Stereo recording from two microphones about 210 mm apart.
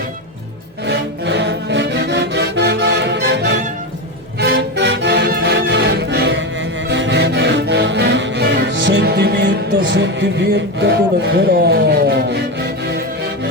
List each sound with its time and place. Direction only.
0.9 s music: 55° right (ahead or behind)
10.8 s speech: 55° right (ahead or behind)